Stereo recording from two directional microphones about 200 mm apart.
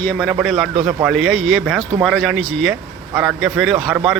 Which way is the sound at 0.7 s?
30° right (ahead or behind).